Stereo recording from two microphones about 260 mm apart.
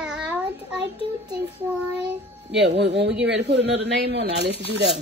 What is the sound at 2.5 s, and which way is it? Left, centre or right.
Speech, right.